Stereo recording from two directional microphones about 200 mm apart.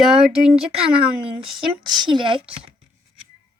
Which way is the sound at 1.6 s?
20° right (ahead or behind).